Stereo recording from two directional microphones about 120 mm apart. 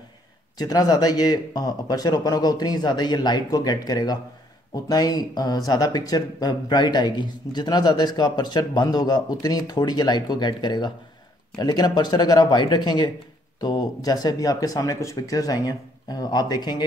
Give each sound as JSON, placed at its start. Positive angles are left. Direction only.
{"t": 0.6, "sound": "speech", "side_deg": 35}